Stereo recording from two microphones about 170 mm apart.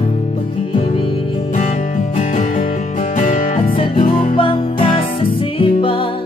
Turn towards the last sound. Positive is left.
turn(degrees=30)  # may be behind; listen again after turning